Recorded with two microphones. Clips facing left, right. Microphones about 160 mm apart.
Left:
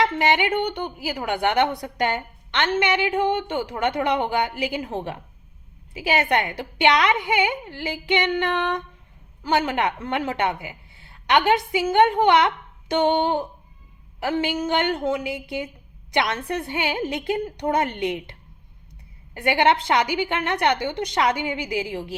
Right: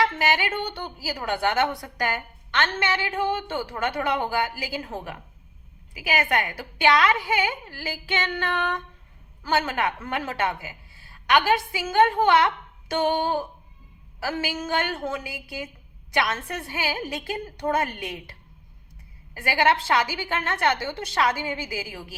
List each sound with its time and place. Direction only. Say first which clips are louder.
0.0 s a woman's voice: left 3 dB; 20° left (ahead or behind)